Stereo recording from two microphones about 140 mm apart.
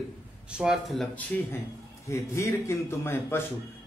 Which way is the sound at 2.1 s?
20° left (ahead or behind).